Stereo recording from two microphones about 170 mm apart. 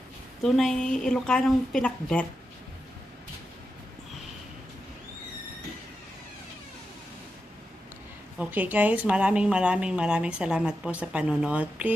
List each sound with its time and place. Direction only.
0.4 s a woman's voice: centre (ahead or behind)
8.4 s speech: 10° right (ahead or behind)